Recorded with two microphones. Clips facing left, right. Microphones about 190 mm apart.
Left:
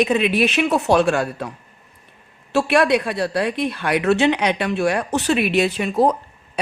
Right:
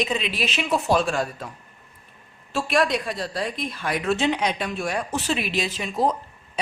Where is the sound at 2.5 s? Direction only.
70° left (ahead or behind).